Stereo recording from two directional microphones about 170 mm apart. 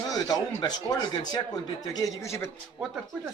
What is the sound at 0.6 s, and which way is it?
Speech, 25° left (ahead or behind).